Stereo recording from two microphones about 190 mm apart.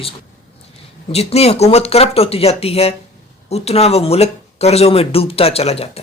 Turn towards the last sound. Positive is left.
turn(degrees=35)  # may be behind; listen again after turning